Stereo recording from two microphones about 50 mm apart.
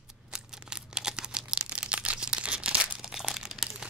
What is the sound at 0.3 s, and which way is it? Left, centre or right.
Crumpling, centre.